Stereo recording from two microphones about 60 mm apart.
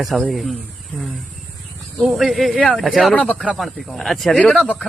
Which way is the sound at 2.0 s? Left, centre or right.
Centre.